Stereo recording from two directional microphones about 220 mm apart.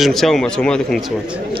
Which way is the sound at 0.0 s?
Centre (ahead or behind).